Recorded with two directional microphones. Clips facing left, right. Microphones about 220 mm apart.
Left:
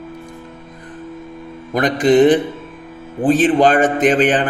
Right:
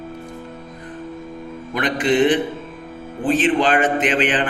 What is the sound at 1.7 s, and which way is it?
A man's voice, 40° left (ahead or behind).